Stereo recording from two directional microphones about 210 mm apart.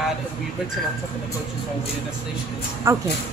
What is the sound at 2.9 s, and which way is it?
Speech, 15° right (ahead or behind).